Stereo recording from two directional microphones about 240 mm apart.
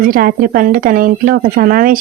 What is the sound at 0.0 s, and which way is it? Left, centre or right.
Speech, right.